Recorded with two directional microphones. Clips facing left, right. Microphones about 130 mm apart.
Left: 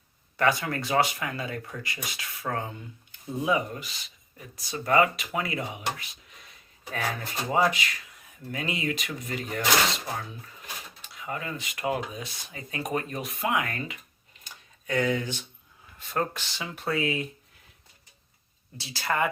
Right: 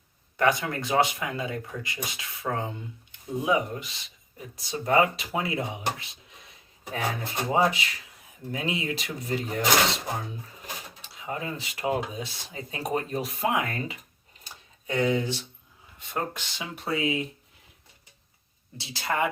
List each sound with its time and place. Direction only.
0.3 s speech: 15° right (ahead or behind)
6.9 s speech: 25° right (ahead or behind)
11.0 s speech: 25° right (ahead or behind)
14.4 s a sound: 25° right (ahead or behind)
16.0 s speech: 20° right (ahead or behind)
18.8 s speech: 20° right (ahead or behind)